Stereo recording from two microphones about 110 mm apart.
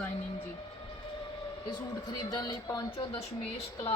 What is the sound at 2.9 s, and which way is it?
Speech, 60° left (ahead or behind).